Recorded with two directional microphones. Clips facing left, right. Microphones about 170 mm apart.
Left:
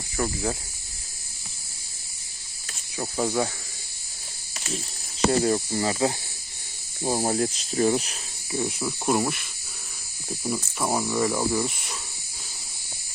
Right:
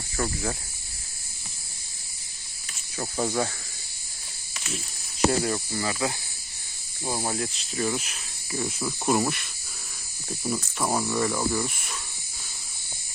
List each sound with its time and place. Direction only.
0.2 s speech: 15° left (ahead or behind)
3.2 s speech: 10° left (ahead or behind)
5.4 s speech: 30° left (ahead or behind)
8.5 s speech: 10° left (ahead or behind)
9.0 s speech: centre (ahead or behind)
11.3 s speech: 20° left (ahead or behind)